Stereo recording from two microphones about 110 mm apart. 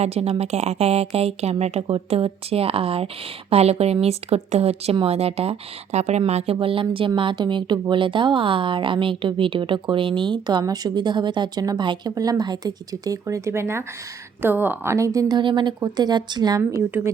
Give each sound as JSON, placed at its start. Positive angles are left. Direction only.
{"t": 0.0, "sound": "a woman's voice", "side_deg": -70}
{"t": 14.9, "sound": "speech", "side_deg": -30}
{"t": 15.4, "sound": "speech", "side_deg": -45}
{"t": 16.6, "sound": "speech", "side_deg": -25}